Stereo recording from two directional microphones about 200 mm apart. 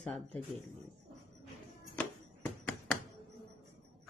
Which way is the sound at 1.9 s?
10° left (ahead or behind).